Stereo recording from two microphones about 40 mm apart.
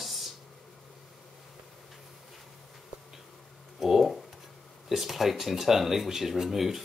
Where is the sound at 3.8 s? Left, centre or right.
Centre.